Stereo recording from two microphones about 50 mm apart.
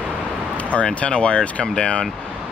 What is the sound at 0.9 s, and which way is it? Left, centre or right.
Speech, left.